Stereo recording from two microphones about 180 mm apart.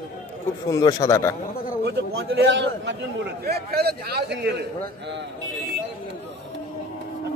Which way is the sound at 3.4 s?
60° right (ahead or behind).